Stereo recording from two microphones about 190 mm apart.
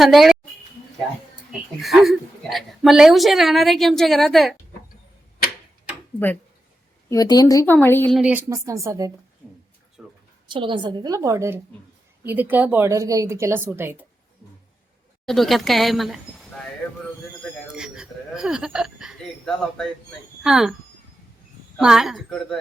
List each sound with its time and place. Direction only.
0.0 s a woman's voice: centre (ahead or behind)
1.8 s a woman's voice: centre (ahead or behind)
7.1 s speech: 20° left (ahead or behind)
8.1 s speech: 5° right (ahead or behind)
10.0 s a sound: 5° right (ahead or behind)
10.5 s a woman's voice: 25° right (ahead or behind); by 14.1 s 10° right (ahead or behind)
15.3 s a woman's voice: centre (ahead or behind)
17.7 s a woman's voice: 5° right (ahead or behind)
21.8 s a woman's voice: 5° right (ahead or behind)